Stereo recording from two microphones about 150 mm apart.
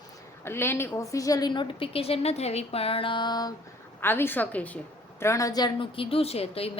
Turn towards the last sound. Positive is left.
turn(degrees=40)  # may be behind; listen again after turning